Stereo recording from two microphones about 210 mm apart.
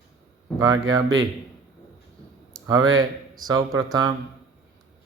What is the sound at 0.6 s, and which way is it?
Mantra, 15° right (ahead or behind).